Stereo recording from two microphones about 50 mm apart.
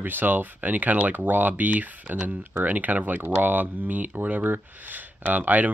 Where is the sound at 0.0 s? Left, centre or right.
Right.